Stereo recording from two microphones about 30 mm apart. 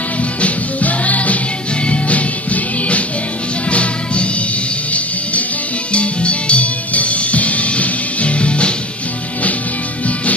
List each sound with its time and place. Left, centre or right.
0.2 s music: left
5.9 s music: left